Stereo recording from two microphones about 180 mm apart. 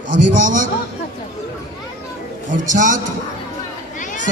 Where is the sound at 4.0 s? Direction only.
45° left (ahead or behind).